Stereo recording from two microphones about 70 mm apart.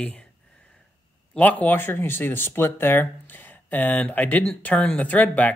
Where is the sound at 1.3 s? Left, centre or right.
Left.